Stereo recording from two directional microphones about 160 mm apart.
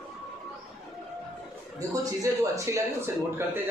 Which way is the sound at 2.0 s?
20° right (ahead or behind).